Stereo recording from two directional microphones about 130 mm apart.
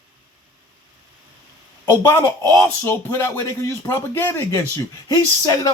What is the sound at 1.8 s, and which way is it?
Speech, 20° left (ahead or behind).